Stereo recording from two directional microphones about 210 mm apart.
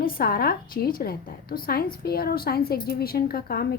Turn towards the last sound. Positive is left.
turn(degrees=45)  # may be behind; listen again after turning